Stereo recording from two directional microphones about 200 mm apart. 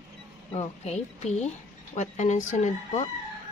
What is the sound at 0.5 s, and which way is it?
Speech, 30° left (ahead or behind).